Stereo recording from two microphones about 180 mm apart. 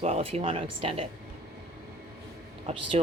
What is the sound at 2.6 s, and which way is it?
Speech, 35° right (ahead or behind).